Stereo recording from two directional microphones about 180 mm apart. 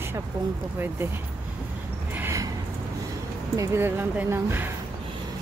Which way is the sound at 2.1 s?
10° right (ahead or behind).